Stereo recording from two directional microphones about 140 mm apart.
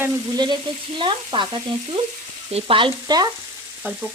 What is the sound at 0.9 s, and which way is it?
Frying, 35° right (ahead or behind).